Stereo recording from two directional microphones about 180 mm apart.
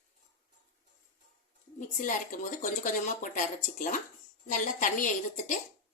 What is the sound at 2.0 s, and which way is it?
Speech, 45° left (ahead or behind).